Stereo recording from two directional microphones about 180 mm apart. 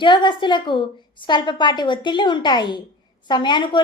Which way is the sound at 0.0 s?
25° left (ahead or behind).